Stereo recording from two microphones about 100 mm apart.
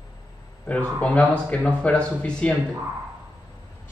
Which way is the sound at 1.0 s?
15° left (ahead or behind).